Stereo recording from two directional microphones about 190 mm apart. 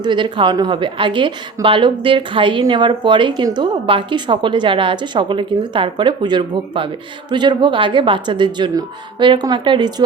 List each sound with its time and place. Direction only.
0.0 s a woman's voice: 25° right (ahead or behind)